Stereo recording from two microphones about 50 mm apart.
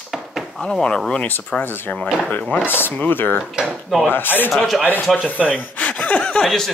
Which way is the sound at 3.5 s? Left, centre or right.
Centre.